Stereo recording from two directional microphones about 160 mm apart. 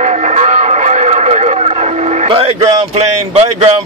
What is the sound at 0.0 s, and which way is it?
Music, 45° right (ahead or behind).